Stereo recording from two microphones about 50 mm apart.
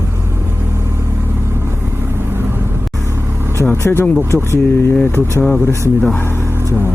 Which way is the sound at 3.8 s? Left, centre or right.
Left.